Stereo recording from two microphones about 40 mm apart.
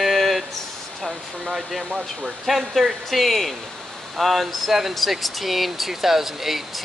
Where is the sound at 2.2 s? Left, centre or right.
Centre.